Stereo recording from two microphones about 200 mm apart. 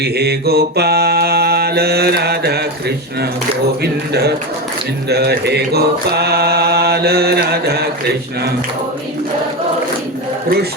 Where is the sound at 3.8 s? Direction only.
55° right (ahead or behind).